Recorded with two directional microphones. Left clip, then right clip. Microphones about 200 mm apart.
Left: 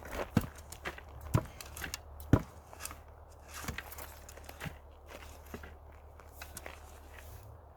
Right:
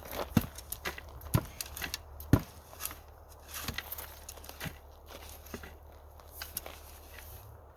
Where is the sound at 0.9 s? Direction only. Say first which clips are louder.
Right 3 dB; 5° left (ahead or behind).